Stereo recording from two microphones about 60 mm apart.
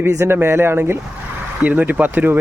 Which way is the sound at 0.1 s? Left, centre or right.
Right.